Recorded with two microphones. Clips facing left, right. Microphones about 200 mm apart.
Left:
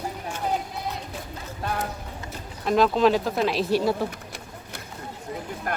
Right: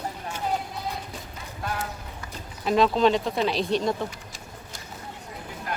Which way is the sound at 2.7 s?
Centre (ahead or behind).